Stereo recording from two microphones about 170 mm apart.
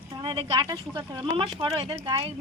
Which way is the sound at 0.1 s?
30° right (ahead or behind).